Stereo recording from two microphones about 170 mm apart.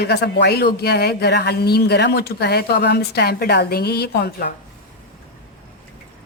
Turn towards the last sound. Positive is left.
turn(degrees=70)  # may be behind; listen again after turning